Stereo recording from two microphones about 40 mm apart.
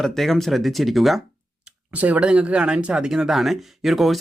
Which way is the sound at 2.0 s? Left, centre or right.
Right.